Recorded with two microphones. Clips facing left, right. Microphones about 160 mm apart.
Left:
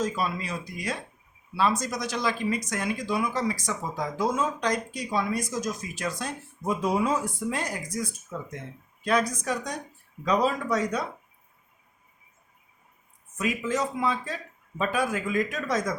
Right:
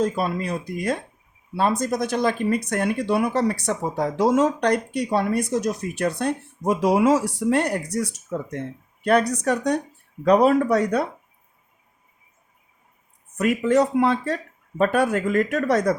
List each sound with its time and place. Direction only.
0.0 s speech: 55° right (ahead or behind)
4.2 s speech: 75° right (ahead or behind)
13.3 s speech: 60° right (ahead or behind)